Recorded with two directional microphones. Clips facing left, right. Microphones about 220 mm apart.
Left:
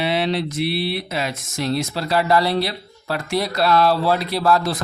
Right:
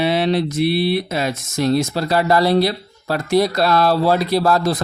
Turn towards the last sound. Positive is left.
turn(degrees=-40)  # may be behind; listen again after turning